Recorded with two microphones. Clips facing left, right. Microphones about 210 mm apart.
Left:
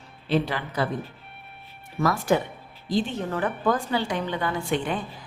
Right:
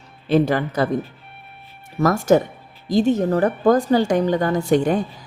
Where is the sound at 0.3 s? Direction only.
45° right (ahead or behind).